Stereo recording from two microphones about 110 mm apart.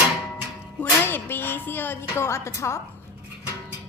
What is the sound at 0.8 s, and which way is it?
A woman's voice, 20° left (ahead or behind).